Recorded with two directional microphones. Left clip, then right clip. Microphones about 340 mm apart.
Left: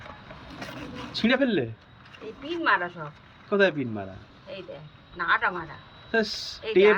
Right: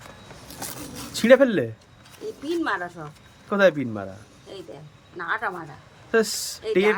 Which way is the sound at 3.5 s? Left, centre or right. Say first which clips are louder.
Right 4 dB; centre.